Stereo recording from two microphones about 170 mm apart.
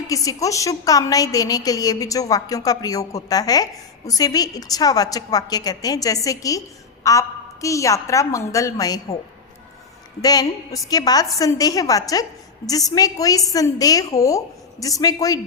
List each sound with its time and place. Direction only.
0.1 s a woman's voice: 20° left (ahead or behind)
10.2 s a woman's voice: 20° left (ahead or behind)